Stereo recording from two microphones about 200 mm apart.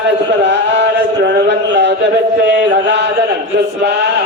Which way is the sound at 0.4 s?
60° right (ahead or behind).